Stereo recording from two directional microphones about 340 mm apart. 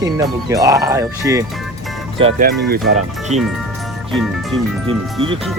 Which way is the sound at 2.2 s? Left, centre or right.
Centre.